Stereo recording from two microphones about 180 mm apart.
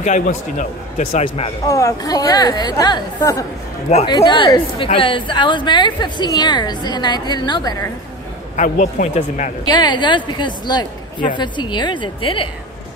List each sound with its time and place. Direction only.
0.0 s speech: 45° left (ahead or behind)
1.7 s a woman's voice: 15° left (ahead or behind)
8.5 s speech: 45° left (ahead or behind)
9.7 s a woman's voice: 25° left (ahead or behind)